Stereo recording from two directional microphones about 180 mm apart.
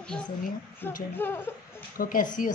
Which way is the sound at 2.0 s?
50° left (ahead or behind).